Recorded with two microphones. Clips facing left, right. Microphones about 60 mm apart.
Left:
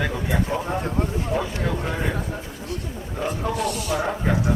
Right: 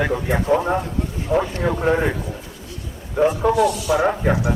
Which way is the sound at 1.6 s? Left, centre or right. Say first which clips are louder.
Right 8 dB; right.